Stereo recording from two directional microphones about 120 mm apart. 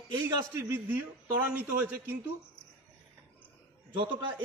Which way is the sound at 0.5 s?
20° right (ahead or behind).